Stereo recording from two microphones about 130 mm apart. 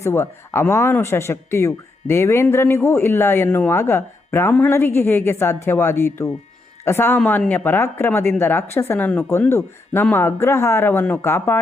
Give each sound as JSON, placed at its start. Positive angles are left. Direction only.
{"t": 0.0, "sound": "speech", "side_deg": 20}